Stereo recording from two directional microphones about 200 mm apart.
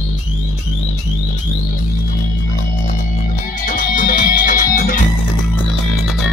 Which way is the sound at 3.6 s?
40° left (ahead or behind).